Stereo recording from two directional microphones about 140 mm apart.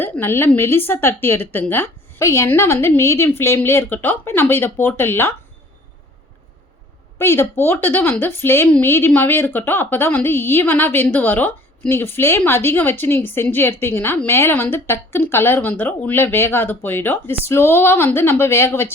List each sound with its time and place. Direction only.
0.0 s a woman's voice: 15° left (ahead or behind)
7.2 s a woman's voice: 15° left (ahead or behind)